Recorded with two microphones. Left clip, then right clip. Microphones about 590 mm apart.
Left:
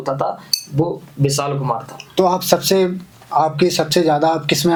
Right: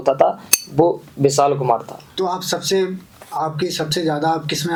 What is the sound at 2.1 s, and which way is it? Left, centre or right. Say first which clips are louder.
Speech: left 7 dB; left.